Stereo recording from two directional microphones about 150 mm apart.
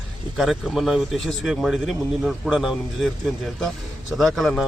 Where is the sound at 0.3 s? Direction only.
Centre (ahead or behind).